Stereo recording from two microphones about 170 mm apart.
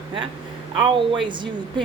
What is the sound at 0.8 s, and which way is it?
Speech, 30° right (ahead or behind).